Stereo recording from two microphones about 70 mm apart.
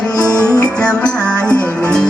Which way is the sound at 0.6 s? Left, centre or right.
Centre.